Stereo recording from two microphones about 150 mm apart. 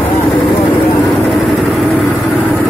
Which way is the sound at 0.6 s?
10° left (ahead or behind).